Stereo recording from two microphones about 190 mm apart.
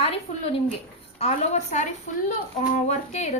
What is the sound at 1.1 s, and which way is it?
Speech, 35° left (ahead or behind).